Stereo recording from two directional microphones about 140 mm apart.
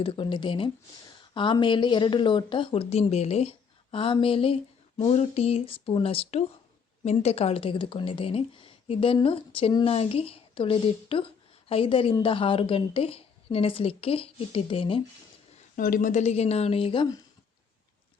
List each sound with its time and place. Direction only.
0.0 s speech: 35° left (ahead or behind)
15.7 s a woman's voice: 70° left (ahead or behind); by 17.1 s 40° left (ahead or behind)